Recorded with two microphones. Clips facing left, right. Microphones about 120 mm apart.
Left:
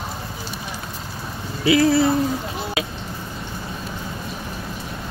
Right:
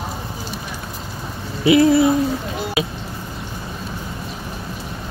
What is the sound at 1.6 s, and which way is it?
Speech, 20° right (ahead or behind).